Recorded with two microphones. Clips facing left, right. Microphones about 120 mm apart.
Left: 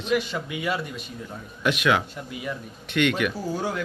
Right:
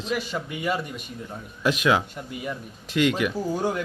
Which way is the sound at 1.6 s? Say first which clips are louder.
Right 1 dB; 30° right (ahead or behind).